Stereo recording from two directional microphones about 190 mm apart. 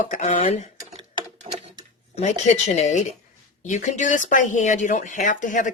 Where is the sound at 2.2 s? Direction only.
40° left (ahead or behind).